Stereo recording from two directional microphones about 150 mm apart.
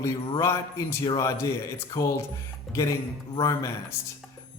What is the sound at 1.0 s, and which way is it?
Speech, 20° left (ahead or behind).